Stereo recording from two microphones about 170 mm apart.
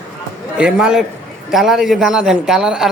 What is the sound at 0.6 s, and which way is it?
A man's voice, 5° right (ahead or behind).